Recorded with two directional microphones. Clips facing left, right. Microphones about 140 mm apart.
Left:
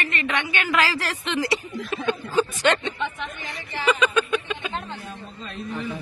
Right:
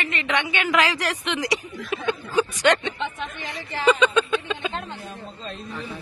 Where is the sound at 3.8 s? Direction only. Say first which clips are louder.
Right 3 dB; 30° right (ahead or behind).